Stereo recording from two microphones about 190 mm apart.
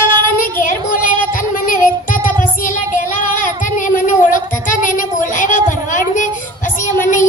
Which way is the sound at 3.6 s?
45° left (ahead or behind).